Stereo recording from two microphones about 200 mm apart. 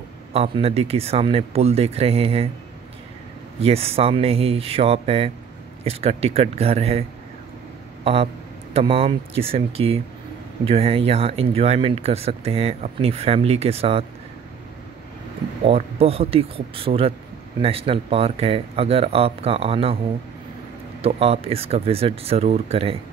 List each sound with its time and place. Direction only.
0.3 s speech: 30° right (ahead or behind)
3.6 s speech: 30° right (ahead or behind)
15.6 s speech: 30° right (ahead or behind)
21.0 s speech: 30° right (ahead or behind)